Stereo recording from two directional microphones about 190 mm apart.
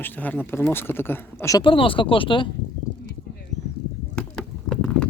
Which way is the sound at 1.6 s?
25° left (ahead or behind).